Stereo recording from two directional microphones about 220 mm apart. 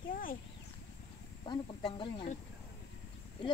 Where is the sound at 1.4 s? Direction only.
20° left (ahead or behind).